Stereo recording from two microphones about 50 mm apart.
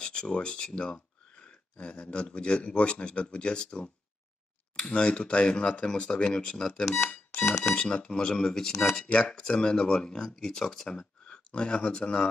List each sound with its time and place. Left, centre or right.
0.0 s speech: centre
7.7 s speech: centre
8.9 s speech: left
11.2 s speech: left